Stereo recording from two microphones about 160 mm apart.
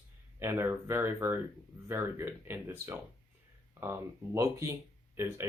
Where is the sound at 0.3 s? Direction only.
15° right (ahead or behind).